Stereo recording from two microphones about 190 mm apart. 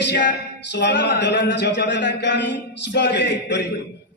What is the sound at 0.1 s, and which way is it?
Speech, 65° left (ahead or behind).